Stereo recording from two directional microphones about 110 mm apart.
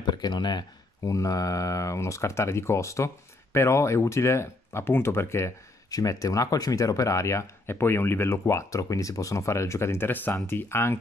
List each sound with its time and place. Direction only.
0.0 s speech: 40° left (ahead or behind); by 11.0 s 20° left (ahead or behind)